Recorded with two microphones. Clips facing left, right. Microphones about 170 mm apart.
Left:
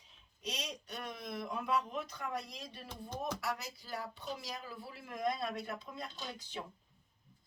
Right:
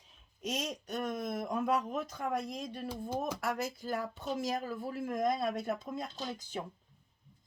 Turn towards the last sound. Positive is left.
turn(degrees=-45)  # may be behind; listen again after turning